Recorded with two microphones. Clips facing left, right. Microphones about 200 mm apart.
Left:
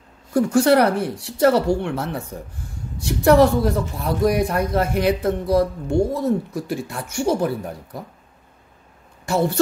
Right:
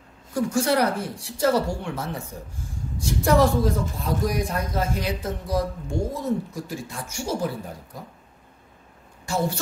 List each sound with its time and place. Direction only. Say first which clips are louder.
0.3 s a man's voice: left 7 dB; 65° left (ahead or behind)